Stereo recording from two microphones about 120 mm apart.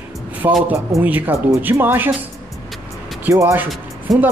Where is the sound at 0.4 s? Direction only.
20° right (ahead or behind).